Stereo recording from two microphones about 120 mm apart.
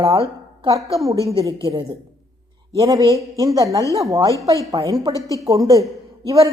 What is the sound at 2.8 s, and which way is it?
A man's voice, 30° right (ahead or behind).